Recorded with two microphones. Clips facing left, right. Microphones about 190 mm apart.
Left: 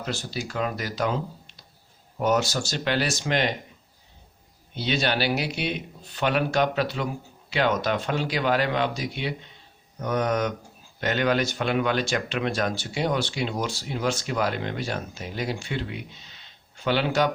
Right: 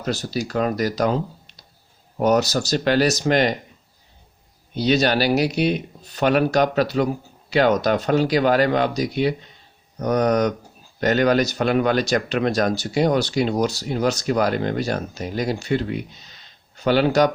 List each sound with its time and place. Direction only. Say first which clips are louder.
0.0 s speech: right 6 dB; 40° right (ahead or behind)
4.7 s speech: right 7 dB; 40° right (ahead or behind)